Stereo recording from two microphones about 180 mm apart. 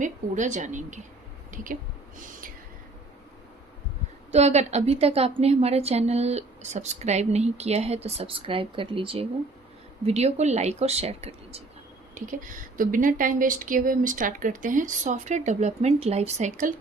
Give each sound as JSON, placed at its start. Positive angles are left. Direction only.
{"t": 0.0, "sound": "speech", "side_deg": -40}
{"t": 4.3, "sound": "a woman's voice", "side_deg": -35}
{"t": 12.2, "sound": "speech", "side_deg": -45}